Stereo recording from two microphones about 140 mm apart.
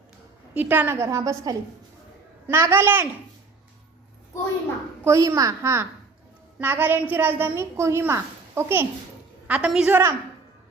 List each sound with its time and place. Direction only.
0.5 s a woman's voice: 10° right (ahead or behind)
5.0 s a woman's voice: 20° right (ahead or behind)